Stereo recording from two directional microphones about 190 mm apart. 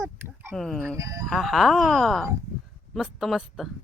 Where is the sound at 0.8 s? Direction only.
15° right (ahead or behind).